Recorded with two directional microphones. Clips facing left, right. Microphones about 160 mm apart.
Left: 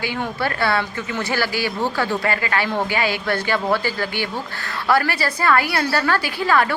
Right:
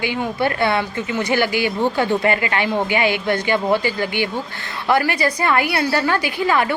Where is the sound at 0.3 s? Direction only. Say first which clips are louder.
Right 2 dB; 20° right (ahead or behind).